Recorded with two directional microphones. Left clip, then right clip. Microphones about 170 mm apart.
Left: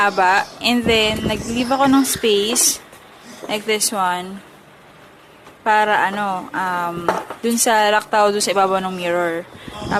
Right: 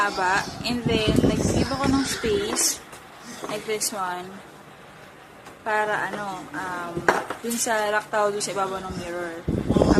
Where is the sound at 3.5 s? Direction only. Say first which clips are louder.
Left 8 dB; 50° left (ahead or behind).